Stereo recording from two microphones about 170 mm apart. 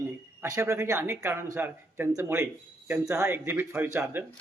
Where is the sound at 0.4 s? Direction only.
15° right (ahead or behind).